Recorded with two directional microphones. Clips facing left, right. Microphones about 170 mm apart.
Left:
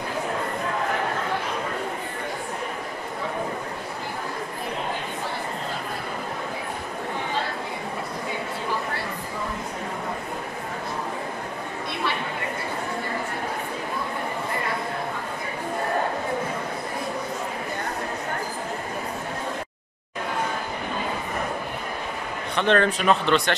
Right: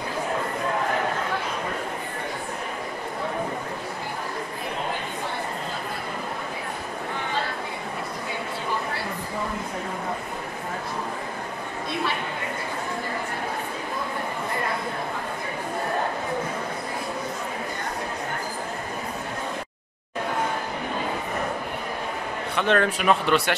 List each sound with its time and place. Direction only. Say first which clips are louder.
22.6 s speech: left 2 dB; 5° right (ahead or behind)